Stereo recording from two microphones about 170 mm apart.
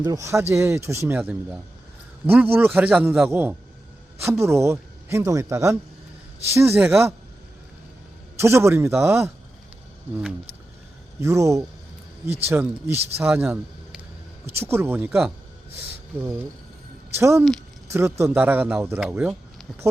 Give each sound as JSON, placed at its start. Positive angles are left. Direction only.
{"t": 0.0, "sound": "a man's voice", "side_deg": -20}
{"t": 8.4, "sound": "a man's voice", "side_deg": -15}
{"t": 11.2, "sound": "a man's voice", "side_deg": -15}